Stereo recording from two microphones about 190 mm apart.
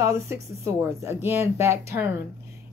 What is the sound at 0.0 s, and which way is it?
Speech, 15° right (ahead or behind).